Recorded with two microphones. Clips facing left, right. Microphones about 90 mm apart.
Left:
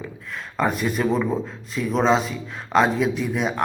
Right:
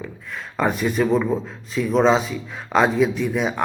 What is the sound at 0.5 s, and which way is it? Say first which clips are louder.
A man's voice: right 2 dB; centre (ahead or behind).